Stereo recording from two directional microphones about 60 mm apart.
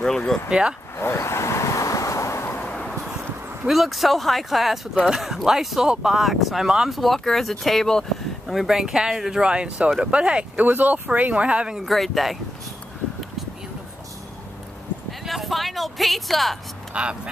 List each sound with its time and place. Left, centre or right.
0.5 s speech: centre
0.9 s vehicle: left
2.6 s vehicle: left
3.6 s speech: centre
11.8 s speech: centre
15.0 s a sound: centre
16.9 s speech: centre